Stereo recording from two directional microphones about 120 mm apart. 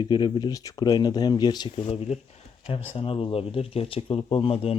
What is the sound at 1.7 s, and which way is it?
Speech, 65° left (ahead or behind).